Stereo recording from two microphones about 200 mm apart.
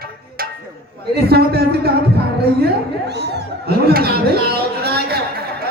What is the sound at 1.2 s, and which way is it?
A man's voice, 55° right (ahead or behind).